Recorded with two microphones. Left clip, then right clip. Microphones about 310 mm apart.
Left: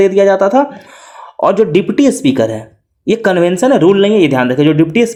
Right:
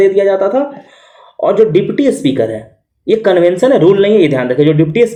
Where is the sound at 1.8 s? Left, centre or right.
Left.